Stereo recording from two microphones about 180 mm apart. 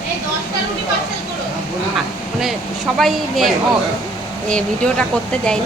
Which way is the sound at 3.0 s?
Centre (ahead or behind).